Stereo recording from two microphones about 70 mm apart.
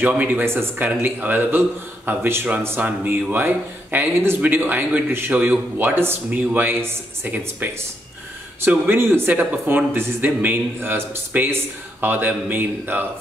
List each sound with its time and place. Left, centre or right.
0.0 s speech: right